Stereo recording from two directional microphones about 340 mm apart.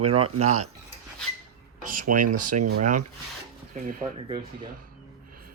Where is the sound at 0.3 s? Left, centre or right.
Right.